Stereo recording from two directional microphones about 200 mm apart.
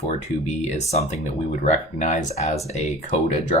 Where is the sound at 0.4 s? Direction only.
35° left (ahead or behind).